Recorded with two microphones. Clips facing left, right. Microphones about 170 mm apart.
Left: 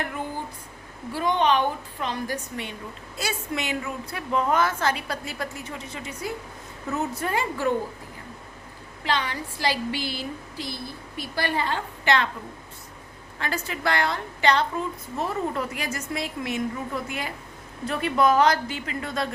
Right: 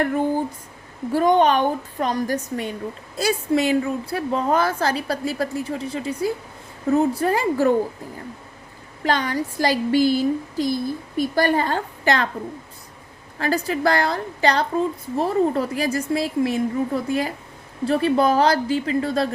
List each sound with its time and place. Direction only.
1.1 s a woman's voice: 45° right (ahead or behind)
9.0 s speech: 45° right (ahead or behind)
13.4 s a woman's voice: 35° right (ahead or behind)